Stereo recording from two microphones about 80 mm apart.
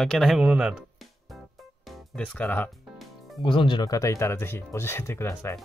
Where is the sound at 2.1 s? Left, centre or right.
Centre.